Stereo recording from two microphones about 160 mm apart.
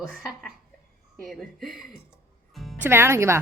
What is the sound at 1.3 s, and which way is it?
Speech, centre (ahead or behind).